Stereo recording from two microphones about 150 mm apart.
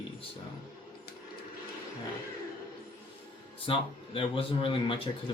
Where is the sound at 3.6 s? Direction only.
35° left (ahead or behind).